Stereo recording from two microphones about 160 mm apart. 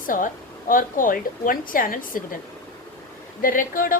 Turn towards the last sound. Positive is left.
turn(degrees=60)  # may be behind; listen again after turning